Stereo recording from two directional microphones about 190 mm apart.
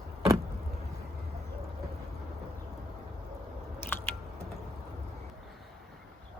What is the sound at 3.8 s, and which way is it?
Biting, 10° left (ahead or behind).